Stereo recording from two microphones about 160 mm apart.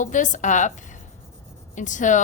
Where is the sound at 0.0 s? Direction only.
50° left (ahead or behind).